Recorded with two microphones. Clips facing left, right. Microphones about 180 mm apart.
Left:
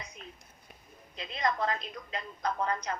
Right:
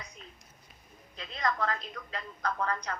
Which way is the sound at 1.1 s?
15° left (ahead or behind).